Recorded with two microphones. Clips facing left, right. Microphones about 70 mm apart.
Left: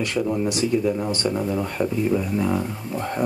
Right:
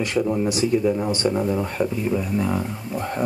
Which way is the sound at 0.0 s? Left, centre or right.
Centre.